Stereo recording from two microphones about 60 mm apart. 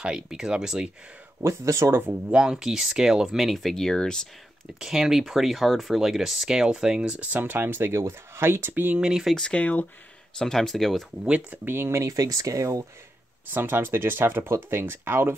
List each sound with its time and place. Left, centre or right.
0.0 s speech: centre
1.4 s speech: right
2.3 s speech: centre
4.7 s speech: centre
7.3 s speech: right
8.9 s speech: centre
9.3 s speech: centre
10.3 s speech: centre
11.2 s speech: right
12.0 s speech: right
13.5 s speech: right